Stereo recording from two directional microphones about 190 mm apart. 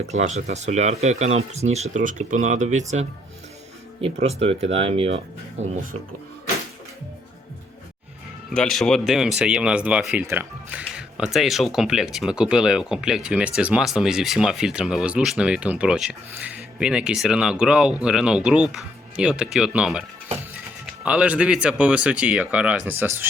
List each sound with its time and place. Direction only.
0.1 s speech: 35° right (ahead or behind)
8.5 s speech: centre (ahead or behind)